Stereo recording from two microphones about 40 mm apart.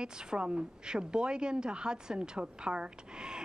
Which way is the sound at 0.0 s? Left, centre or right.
Centre.